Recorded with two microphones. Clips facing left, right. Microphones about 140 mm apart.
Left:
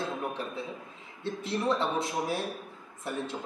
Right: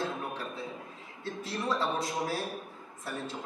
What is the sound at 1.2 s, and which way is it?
A man's voice, 25° left (ahead or behind).